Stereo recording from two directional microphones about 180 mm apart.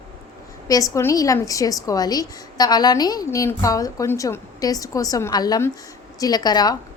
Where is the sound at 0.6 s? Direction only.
20° left (ahead or behind).